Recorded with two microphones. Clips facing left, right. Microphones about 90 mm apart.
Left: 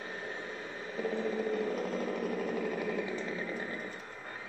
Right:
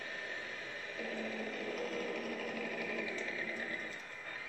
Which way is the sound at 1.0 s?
25° left (ahead or behind).